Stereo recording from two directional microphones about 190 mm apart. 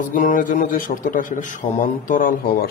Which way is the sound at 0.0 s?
45° left (ahead or behind).